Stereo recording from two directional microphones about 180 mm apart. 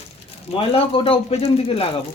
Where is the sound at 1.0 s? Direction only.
35° left (ahead or behind).